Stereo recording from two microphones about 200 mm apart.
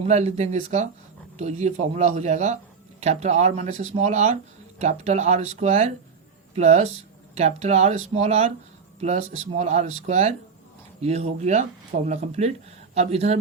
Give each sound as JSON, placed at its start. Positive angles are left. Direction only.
{"t": 0.0, "sound": "speech", "side_deg": -35}